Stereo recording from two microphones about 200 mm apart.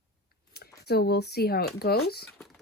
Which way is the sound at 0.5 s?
55° left (ahead or behind).